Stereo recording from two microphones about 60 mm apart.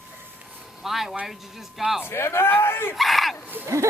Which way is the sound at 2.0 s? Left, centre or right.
Left.